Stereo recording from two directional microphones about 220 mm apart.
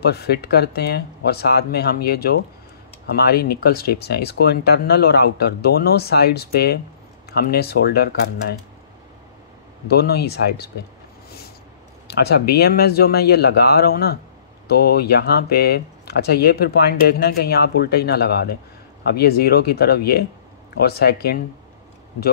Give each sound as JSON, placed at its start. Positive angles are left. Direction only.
{"t": 0.0, "sound": "speech", "side_deg": 45}
{"t": 9.8, "sound": "speech", "side_deg": 45}
{"t": 12.1, "sound": "speech", "side_deg": 45}